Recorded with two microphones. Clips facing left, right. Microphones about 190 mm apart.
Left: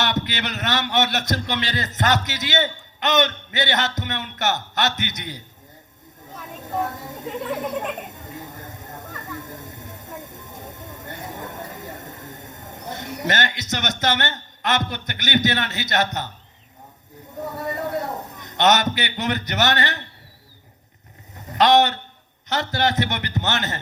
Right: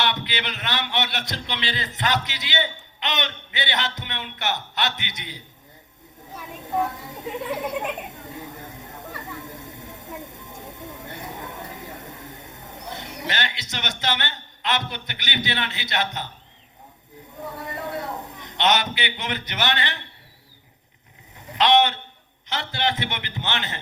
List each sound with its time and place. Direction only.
0.0 s a man's voice: 45° left (ahead or behind)
6.8 s a woman's voice: 45° left (ahead or behind)
7.5 s speech: 5° right (ahead or behind)
8.0 s a sound: 45° left (ahead or behind)
17.4 s a man's voice: 45° left (ahead or behind)
21.3 s a sound: 40° left (ahead or behind)
22.4 s a man's voice: 45° left (ahead or behind)